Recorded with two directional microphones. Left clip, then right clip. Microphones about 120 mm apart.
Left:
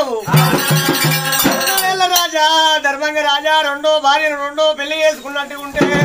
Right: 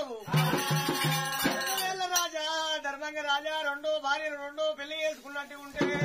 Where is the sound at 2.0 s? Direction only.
20° left (ahead or behind).